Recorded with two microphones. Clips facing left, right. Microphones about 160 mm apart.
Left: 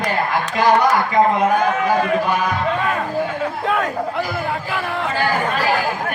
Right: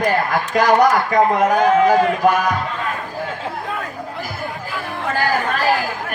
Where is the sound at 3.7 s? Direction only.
85° left.